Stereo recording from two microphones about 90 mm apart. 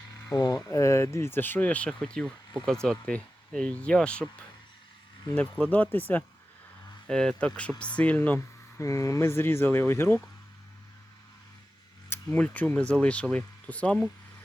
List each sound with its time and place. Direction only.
0.3 s speech: 45° left (ahead or behind); by 4.3 s 10° left (ahead or behind)
5.3 s speech: 15° left (ahead or behind)
7.1 s speech: 10° left (ahead or behind)
8.8 s speech: 35° left (ahead or behind)
12.0 s speech: 25° left (ahead or behind)